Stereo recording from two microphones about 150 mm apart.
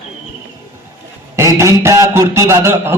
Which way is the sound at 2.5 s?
15° right (ahead or behind).